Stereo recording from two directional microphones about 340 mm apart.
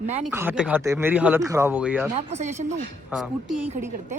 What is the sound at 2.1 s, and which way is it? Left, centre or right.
Speech, centre.